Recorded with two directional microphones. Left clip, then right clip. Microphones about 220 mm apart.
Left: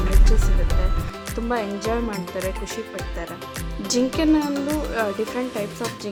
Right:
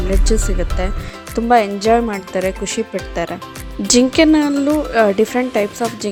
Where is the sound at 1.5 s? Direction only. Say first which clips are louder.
Right 12 dB; 30° right (ahead or behind).